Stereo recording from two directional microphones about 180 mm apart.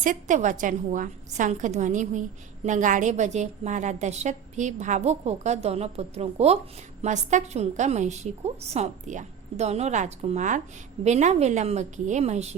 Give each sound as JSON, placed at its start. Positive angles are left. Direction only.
{"t": 0.0, "sound": "a woman's voice", "side_deg": -45}